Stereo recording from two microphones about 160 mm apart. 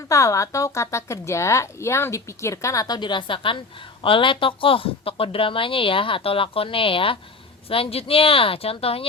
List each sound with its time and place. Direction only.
0.1 s speech: 20° left (ahead or behind); by 9.0 s 35° left (ahead or behind)